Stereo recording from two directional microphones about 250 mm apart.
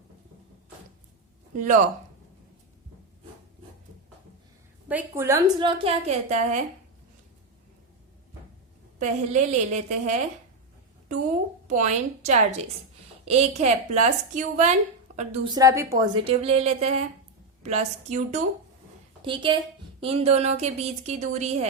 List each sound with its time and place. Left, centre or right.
1.5 s speech: right
4.9 s a woman's voice: centre; by 6.6 s right
9.0 s a woman's voice: right
11.7 s a woman's voice: right
15.4 s a woman's voice: centre
16.2 s a woman's voice: right